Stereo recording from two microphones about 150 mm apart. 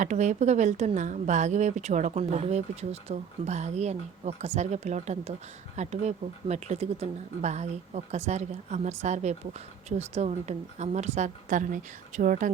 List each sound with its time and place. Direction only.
0.0 s a woman's voice: 55° right (ahead or behind)